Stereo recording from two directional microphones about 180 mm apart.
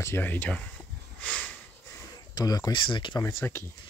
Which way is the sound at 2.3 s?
20° left (ahead or behind).